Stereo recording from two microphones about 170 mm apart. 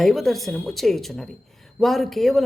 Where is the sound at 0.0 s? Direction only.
Centre (ahead or behind).